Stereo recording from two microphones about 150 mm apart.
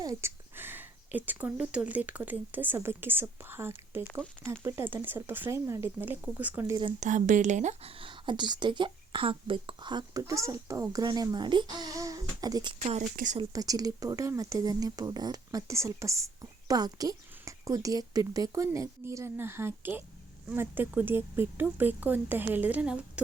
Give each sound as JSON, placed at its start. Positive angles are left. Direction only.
{"t": 0.0, "sound": "speech", "side_deg": -20}
{"t": 7.0, "sound": "speech", "side_deg": -55}
{"t": 12.8, "sound": "speech", "side_deg": -45}
{"t": 13.1, "sound": "speech", "side_deg": -55}
{"t": 13.5, "sound": "speech", "side_deg": -25}